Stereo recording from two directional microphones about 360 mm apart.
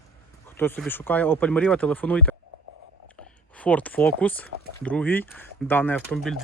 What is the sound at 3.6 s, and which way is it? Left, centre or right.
Speech, centre.